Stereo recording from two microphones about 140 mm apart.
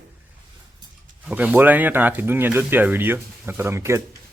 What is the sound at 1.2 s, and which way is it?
Speech, 10° right (ahead or behind).